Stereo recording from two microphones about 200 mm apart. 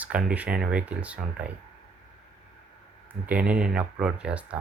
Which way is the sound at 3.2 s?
5° right (ahead or behind).